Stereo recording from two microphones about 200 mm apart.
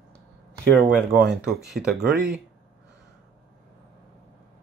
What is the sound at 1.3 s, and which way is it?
Speech, centre (ahead or behind).